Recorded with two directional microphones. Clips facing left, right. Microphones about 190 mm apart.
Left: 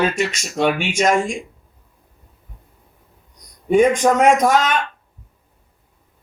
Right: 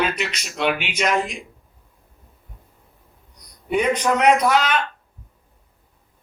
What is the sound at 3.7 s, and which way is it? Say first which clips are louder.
Speech: left 6 dB; 45° left (ahead or behind).